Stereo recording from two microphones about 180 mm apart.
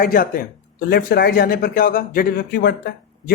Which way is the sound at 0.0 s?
50° left (ahead or behind).